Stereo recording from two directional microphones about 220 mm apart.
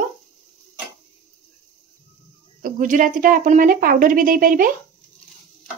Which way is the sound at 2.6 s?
35° right (ahead or behind).